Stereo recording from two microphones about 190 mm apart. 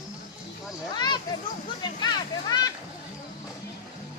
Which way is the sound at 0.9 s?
25° left (ahead or behind).